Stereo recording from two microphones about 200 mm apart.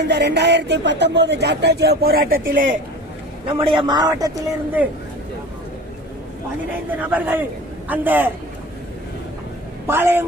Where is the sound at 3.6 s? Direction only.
25° right (ahead or behind).